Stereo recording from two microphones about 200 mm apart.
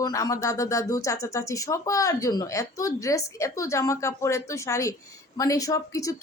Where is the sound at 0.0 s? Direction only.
15° left (ahead or behind).